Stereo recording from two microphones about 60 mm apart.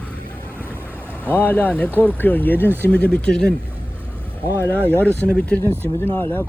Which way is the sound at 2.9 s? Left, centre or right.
Centre.